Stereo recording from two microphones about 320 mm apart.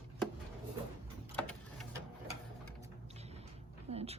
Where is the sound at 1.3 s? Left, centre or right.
Centre.